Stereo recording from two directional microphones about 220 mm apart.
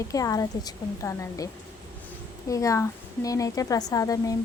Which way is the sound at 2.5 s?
15° left (ahead or behind).